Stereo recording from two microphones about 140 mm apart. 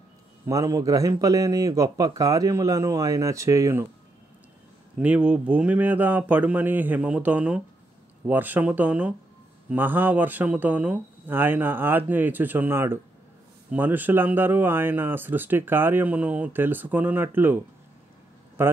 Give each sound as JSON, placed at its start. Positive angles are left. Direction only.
{"t": 0.5, "sound": "a man's voice", "side_deg": -25}
{"t": 4.9, "sound": "a man's voice", "side_deg": -10}